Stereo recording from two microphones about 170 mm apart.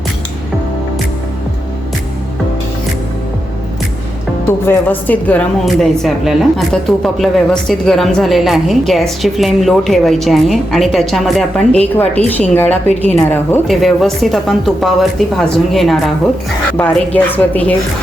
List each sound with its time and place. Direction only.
4.6 s a woman's voice: 10° left (ahead or behind)
13.7 s a woman's voice: centre (ahead or behind)